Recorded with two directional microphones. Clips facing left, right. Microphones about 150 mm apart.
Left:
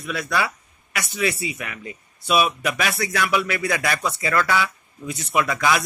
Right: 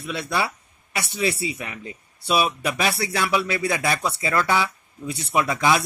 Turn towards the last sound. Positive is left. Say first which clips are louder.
# even
turn(degrees=-25)  # may be behind; listen again after turning